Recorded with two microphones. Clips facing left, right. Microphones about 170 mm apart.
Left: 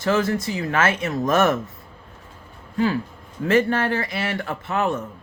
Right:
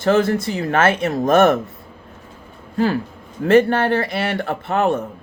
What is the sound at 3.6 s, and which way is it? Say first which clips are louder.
Speech: right 4 dB; 60° right (ahead or behind).